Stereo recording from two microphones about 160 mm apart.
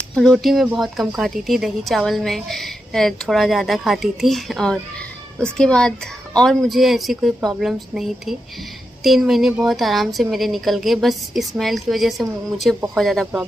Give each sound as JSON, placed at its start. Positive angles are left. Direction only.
{"t": 0.1, "sound": "a woman's voice", "side_deg": 0}